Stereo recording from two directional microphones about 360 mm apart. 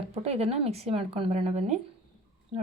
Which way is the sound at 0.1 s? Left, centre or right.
Centre.